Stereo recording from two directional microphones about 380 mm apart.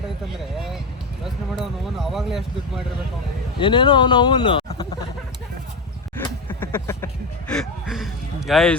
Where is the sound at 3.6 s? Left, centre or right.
Centre.